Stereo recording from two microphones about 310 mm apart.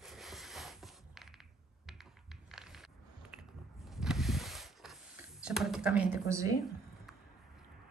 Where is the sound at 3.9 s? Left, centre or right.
Centre.